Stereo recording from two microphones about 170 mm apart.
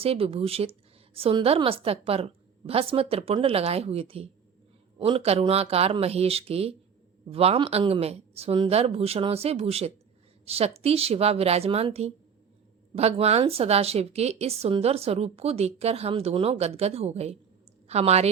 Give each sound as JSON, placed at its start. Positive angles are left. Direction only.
{"t": 0.0, "sound": "a woman's voice", "side_deg": -35}